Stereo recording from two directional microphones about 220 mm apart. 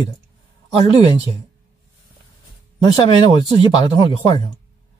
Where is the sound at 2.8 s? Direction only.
20° left (ahead or behind).